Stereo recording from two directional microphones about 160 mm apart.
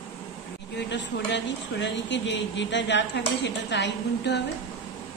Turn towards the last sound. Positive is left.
turn(degrees=90)